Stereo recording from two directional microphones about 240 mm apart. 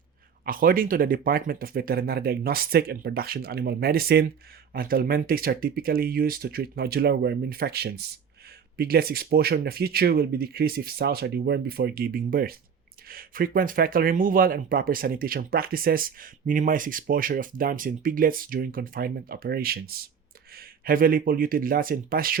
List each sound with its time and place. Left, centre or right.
0.4 s speech: right